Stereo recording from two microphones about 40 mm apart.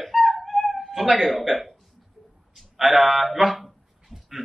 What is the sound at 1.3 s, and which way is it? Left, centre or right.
Speech, centre.